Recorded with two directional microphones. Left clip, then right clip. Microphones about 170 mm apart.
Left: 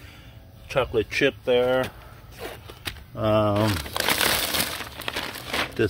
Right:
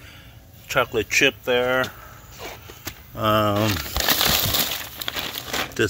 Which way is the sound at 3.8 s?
20° left (ahead or behind).